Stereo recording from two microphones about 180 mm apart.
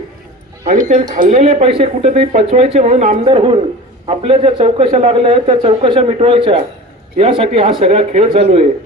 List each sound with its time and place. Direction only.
0.6 s a man's voice: 40° right (ahead or behind)
3.2 s a man's voice: 30° right (ahead or behind)